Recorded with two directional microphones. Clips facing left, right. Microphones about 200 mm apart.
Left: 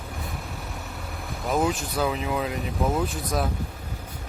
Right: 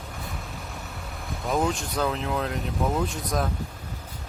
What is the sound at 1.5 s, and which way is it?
Speech, 5° left (ahead or behind).